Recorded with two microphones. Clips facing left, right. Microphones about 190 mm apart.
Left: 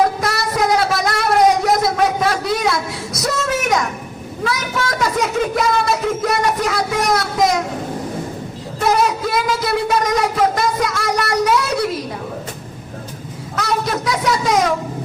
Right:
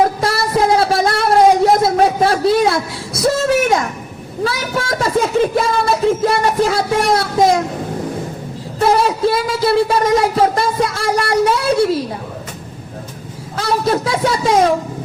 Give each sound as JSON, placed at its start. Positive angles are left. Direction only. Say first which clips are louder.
{"t": 0.2, "sound": "a sound", "louder": "right 3 dB", "side_deg": -30}
{"t": 4.4, "sound": "speech", "louder": "right 2 dB", "side_deg": -30}
{"t": 8.8, "sound": "speech", "louder": "right 3 dB", "side_deg": -30}
{"t": 13.6, "sound": "speech", "louder": "right 4 dB", "side_deg": -30}